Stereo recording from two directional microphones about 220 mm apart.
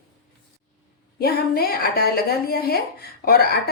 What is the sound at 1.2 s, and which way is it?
A woman's voice, 45° left (ahead or behind).